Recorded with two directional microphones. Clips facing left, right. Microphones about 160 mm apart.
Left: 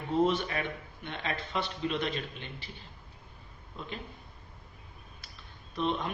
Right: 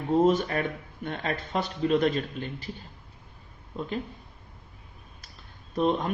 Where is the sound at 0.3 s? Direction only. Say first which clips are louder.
Right 6 dB; 45° right (ahead or behind).